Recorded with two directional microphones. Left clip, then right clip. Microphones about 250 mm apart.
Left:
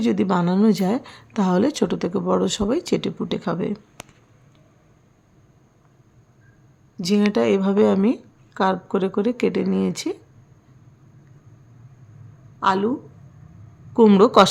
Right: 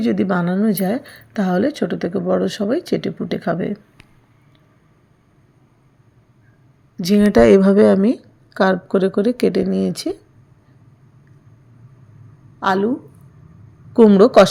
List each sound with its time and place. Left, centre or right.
0.0 s speech: centre
6.9 s speech: centre
12.5 s a woman's voice: centre
14.0 s speech: centre